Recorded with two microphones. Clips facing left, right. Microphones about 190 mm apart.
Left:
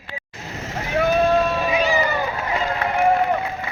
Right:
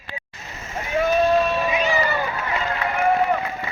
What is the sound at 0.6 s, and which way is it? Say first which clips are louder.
Vehicle: left 1 dB; 80° left.